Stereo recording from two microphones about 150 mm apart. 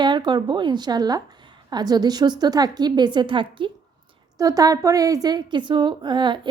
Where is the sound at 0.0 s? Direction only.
30° right (ahead or behind).